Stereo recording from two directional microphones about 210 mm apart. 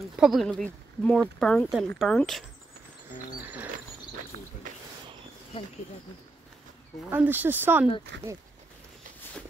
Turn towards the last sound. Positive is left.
turn(degrees=-10)  # may be behind; listen again after turning